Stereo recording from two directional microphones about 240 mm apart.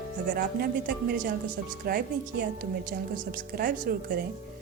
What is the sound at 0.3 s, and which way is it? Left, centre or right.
A woman's voice, right.